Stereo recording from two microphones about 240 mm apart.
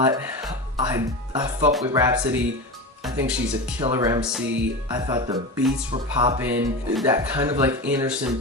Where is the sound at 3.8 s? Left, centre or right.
Centre.